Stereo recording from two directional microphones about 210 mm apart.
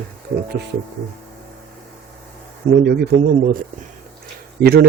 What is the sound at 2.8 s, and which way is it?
A man's voice, 45° right (ahead or behind).